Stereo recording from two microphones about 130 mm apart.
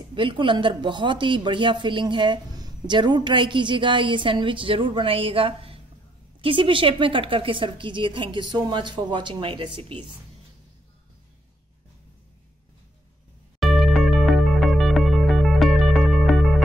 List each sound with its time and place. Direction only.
0.1 s a woman's voice: 40° right (ahead or behind)
13.6 s music: centre (ahead or behind)